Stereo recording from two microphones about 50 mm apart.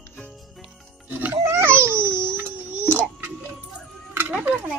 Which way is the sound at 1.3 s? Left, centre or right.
Right.